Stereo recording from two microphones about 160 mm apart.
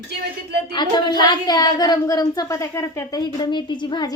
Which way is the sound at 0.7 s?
30° left (ahead or behind).